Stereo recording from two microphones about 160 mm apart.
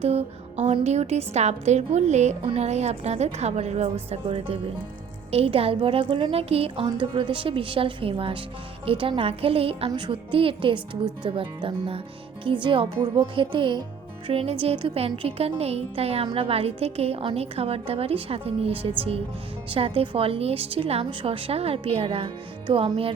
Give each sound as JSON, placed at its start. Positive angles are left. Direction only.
{"t": 0.0, "sound": "a woman's voice", "side_deg": -40}
{"t": 5.3, "sound": "music", "side_deg": -40}